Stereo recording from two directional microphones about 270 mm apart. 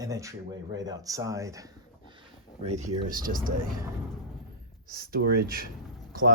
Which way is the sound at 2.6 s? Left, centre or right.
Right.